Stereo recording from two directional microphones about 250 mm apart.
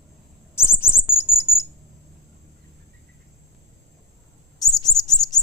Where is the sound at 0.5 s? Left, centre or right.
Centre.